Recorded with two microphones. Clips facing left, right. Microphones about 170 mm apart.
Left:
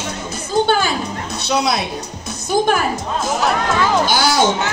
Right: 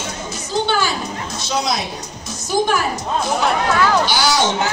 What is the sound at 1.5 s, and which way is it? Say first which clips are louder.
Speech: left 3 dB; 65° left (ahead or behind).